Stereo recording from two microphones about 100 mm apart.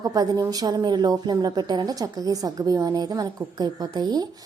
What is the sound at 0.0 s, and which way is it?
A woman's voice, 40° right (ahead or behind).